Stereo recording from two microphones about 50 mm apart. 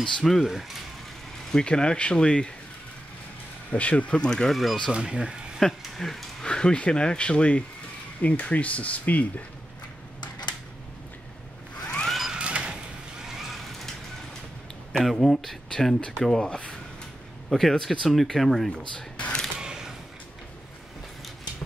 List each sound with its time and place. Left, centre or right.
0.2 s speech: centre
1.5 s speech: centre
3.7 s speech: left
4.9 s speech: centre
5.6 s speech: centre
6.4 s a sound: centre
6.8 s speech: centre
11.8 s a sound: left
12.3 s a sound: right
14.9 s speech: centre
15.7 s speech: centre
17.5 s speech: centre
18.9 s a sound: centre
19.6 s mechanisms: centre